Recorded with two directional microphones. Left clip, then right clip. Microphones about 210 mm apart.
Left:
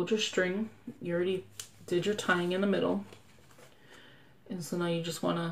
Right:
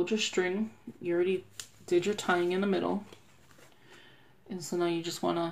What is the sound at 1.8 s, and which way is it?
Speech, 35° right (ahead or behind).